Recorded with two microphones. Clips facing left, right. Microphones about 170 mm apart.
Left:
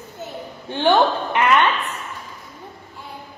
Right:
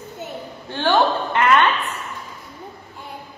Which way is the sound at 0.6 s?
15° left (ahead or behind).